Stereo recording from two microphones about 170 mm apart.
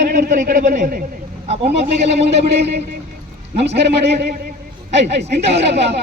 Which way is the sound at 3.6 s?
90° right.